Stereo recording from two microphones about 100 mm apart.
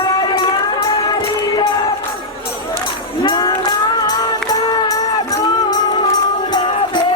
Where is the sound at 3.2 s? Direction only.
50° left (ahead or behind).